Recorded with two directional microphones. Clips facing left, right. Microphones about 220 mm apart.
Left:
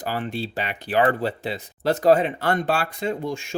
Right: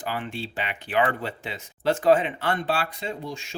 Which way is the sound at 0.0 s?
40° left (ahead or behind).